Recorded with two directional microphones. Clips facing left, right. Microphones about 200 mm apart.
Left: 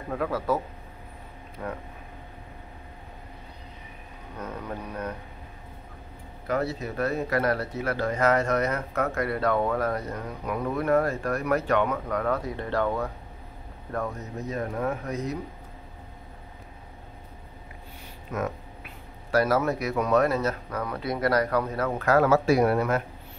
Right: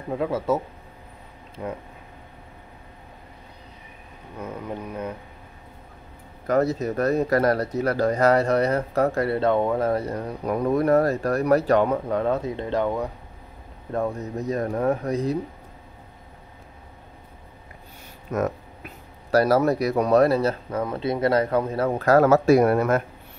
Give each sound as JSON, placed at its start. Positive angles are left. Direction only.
{"t": 0.1, "sound": "a man's voice", "side_deg": -25}
{"t": 1.6, "sound": "speech", "side_deg": -15}
{"t": 4.4, "sound": "speech", "side_deg": -10}
{"t": 6.4, "sound": "speech", "side_deg": -40}
{"t": 13.9, "sound": "speech", "side_deg": -30}
{"t": 18.3, "sound": "a sound", "side_deg": -40}
{"t": 19.3, "sound": "speech", "side_deg": -35}